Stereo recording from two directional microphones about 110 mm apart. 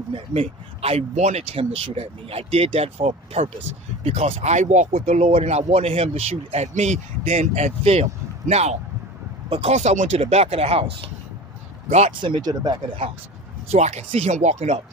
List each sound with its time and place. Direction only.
0.1 s speech: 65° right (ahead or behind); by 1.6 s 90° right
1.6 s speech: 60° right (ahead or behind); by 8.7 s 80° right
9.6 s speech: 90° right; by 11.1 s 65° right (ahead or behind)
12.2 s speech: 45° right (ahead or behind)
13.7 s speech: 85° right